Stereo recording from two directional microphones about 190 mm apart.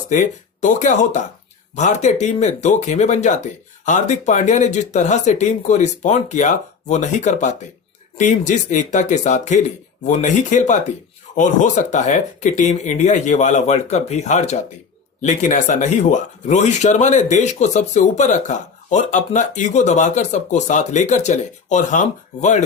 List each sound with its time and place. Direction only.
0.1 s speech: 40° left (ahead or behind)